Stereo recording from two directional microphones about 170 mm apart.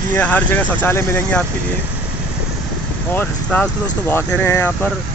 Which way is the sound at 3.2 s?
5° left (ahead or behind).